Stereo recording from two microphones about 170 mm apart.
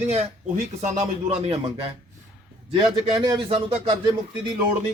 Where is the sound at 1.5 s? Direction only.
35° right (ahead or behind).